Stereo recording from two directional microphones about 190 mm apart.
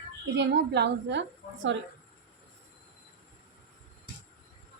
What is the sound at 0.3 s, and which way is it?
Speech, 65° right (ahead or behind).